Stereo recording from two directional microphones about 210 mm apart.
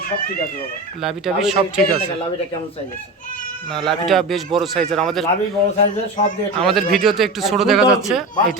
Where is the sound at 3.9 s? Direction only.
Centre (ahead or behind).